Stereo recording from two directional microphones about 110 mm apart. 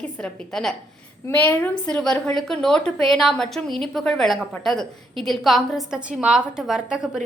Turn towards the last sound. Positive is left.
turn(degrees=-5)  # may be behind; listen again after turning